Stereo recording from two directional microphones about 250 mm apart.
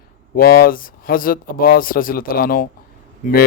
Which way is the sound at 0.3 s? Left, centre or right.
Left.